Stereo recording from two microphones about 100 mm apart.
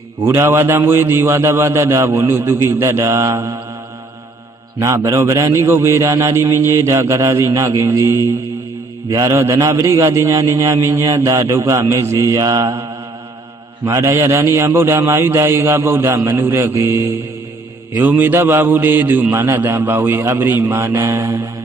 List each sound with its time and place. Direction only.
0.2 s a man's voice: 25° right (ahead or behind)
4.8 s a man's voice: 30° right (ahead or behind)